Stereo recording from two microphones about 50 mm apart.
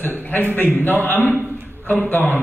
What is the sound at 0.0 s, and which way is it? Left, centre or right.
A man's voice, left.